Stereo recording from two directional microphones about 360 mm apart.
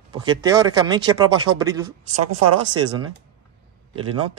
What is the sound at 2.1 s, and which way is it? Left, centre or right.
Speech, right.